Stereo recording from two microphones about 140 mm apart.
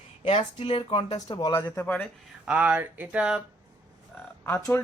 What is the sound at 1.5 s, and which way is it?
Speech, 20° left (ahead or behind).